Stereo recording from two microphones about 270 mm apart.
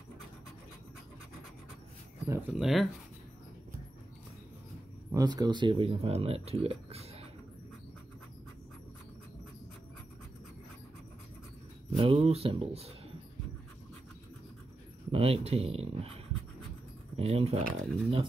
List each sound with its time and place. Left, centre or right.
2.2 s speech: centre
5.1 s speech: centre
12.0 s speech: right
15.0 s speech: right
17.2 s speech: right